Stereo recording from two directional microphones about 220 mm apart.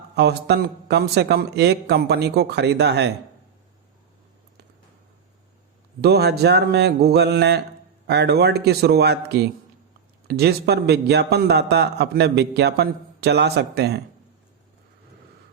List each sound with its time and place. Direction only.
0.2 s a man's voice: 50° right (ahead or behind)
6.0 s a man's voice: 45° right (ahead or behind)